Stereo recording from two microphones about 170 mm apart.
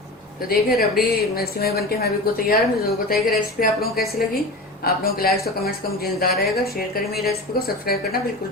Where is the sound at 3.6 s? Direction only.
55° left (ahead or behind).